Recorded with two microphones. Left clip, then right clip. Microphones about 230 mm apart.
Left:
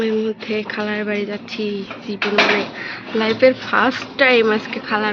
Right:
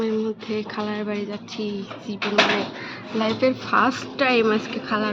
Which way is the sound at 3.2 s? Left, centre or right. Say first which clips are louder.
Left 7 dB; centre.